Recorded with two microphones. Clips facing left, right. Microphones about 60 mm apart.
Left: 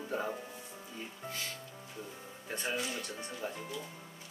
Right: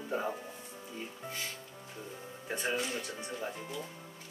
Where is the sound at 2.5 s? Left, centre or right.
Centre.